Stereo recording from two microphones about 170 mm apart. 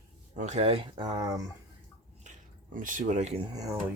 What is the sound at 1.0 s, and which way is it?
Speech, 25° right (ahead or behind).